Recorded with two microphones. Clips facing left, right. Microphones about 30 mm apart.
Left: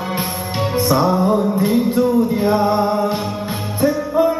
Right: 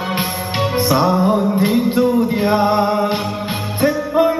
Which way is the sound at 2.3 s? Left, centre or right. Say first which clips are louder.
Right 1 dB; right.